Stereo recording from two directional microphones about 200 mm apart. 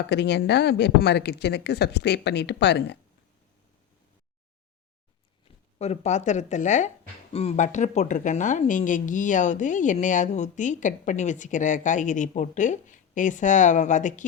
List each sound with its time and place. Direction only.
0.1 s speech: 60° left (ahead or behind)
5.5 s speech: 30° left (ahead or behind)